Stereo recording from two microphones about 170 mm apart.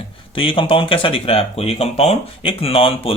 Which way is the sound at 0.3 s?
30° left (ahead or behind).